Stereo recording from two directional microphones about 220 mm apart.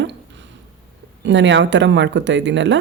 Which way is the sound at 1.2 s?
55° right (ahead or behind).